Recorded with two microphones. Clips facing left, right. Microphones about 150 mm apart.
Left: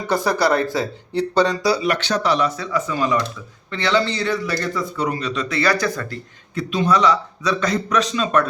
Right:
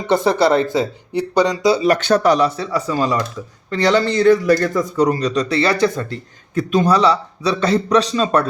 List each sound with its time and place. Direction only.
0.1 s speech: 25° right (ahead or behind)
1.8 s speech: 45° right (ahead or behind); by 6.1 s 25° right (ahead or behind)
6.5 s speech: 45° right (ahead or behind)